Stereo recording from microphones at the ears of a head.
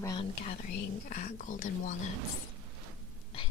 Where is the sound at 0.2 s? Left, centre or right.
Left.